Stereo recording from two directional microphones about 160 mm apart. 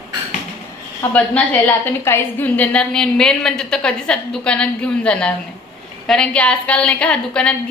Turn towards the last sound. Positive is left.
turn(degrees=5)  # may be behind; listen again after turning